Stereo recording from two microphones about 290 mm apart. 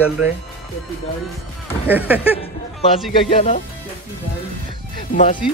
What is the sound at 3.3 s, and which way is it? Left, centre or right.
Speech, left.